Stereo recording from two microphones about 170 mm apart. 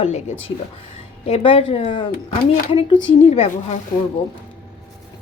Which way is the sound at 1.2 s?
35° left (ahead or behind).